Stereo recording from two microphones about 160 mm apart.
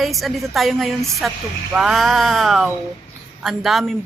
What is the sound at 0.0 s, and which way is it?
A woman's voice, centre (ahead or behind).